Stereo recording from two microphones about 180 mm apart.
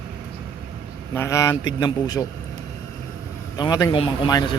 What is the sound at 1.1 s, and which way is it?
A man's voice, 15° left (ahead or behind).